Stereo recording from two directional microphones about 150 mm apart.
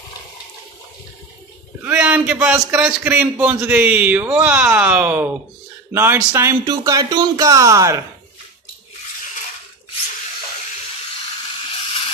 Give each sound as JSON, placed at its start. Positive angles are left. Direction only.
{"t": 1.9, "sound": "a man's voice", "side_deg": -10}